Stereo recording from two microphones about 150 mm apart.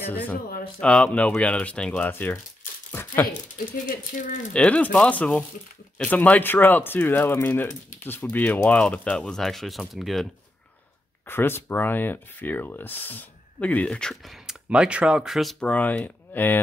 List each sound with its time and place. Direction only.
0.1 s speech: 10° left (ahead or behind)
2.9 s a sound: 15° left (ahead or behind)
3.5 s speech: 60° left (ahead or behind)
4.6 s speech: 10° left (ahead or behind)
11.2 s speech: 15° left (ahead or behind)